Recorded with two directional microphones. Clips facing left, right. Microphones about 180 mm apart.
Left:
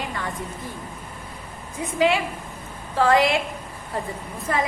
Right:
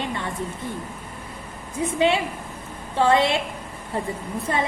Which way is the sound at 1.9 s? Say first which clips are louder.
Left 1 dB; 25° right (ahead or behind).